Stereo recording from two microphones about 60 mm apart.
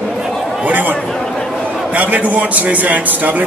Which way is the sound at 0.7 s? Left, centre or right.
Right.